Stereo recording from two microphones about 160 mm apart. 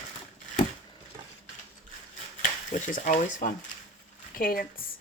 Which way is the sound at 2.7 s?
50° left (ahead or behind).